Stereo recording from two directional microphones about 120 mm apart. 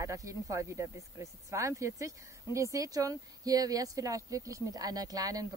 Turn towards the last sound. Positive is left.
turn(degrees=-30)  # may be behind; listen again after turning